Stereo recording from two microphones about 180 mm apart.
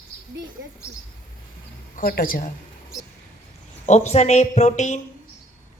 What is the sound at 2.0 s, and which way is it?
Speech, 55° left (ahead or behind).